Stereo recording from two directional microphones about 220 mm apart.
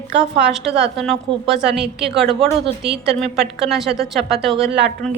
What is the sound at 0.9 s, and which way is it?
A woman's voice, centre (ahead or behind).